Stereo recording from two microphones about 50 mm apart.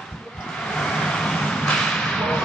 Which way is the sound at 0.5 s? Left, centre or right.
Centre.